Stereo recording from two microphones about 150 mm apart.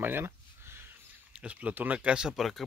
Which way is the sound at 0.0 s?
15° right (ahead or behind).